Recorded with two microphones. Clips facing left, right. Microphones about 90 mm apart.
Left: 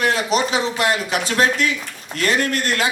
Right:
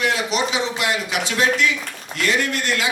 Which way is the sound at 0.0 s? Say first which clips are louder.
Left 2 dB; 45° left (ahead or behind).